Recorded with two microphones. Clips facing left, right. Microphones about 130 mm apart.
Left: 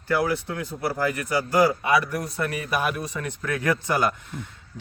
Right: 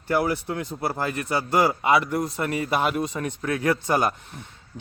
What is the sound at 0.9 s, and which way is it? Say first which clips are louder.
A man's voice: left 3 dB; 25° right (ahead or behind).